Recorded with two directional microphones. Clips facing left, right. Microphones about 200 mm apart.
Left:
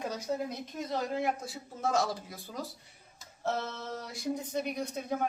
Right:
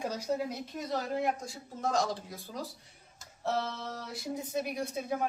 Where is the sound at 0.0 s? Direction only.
10° right (ahead or behind).